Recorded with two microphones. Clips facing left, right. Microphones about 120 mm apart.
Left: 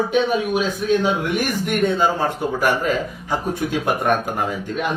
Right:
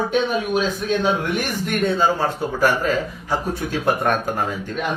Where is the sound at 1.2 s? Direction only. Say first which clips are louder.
Left 2 dB; 10° left (ahead or behind).